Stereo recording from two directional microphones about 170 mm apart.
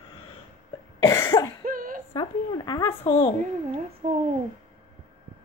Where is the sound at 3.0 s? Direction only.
35° left (ahead or behind).